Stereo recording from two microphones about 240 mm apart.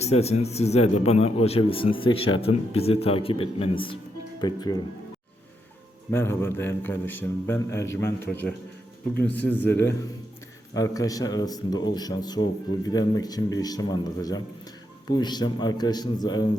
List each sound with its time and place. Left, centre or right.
0.0 s speech: left
6.1 s speech: centre